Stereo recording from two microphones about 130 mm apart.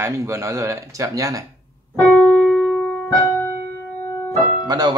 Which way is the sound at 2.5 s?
5° left (ahead or behind).